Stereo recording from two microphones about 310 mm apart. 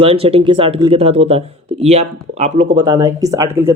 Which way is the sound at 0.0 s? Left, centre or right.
Centre.